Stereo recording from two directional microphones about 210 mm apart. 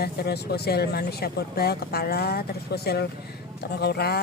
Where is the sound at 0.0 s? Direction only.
50° left (ahead or behind).